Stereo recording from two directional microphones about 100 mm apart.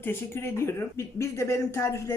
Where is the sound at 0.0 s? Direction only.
25° left (ahead or behind).